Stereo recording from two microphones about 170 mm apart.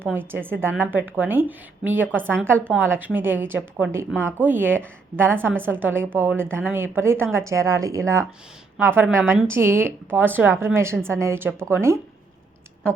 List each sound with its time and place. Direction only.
0.0 s a woman's voice: 10° right (ahead or behind)
2.2 s speech: 5° left (ahead or behind)
2.7 s a woman's voice: 10° right (ahead or behind)